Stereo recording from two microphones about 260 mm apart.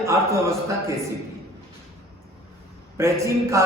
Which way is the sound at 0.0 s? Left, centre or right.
Centre.